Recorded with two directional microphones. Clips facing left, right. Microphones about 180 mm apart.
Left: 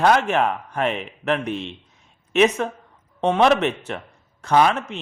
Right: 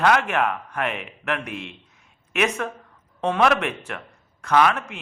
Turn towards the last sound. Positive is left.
turn(degrees=30)  # may be behind; listen again after turning